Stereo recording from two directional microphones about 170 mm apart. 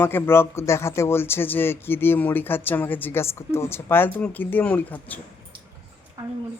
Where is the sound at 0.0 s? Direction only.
15° left (ahead or behind).